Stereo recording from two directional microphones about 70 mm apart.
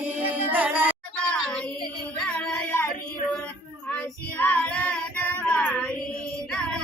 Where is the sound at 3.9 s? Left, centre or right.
Left.